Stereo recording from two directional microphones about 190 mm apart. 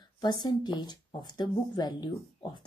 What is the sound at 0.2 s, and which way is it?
Speech, 20° left (ahead or behind).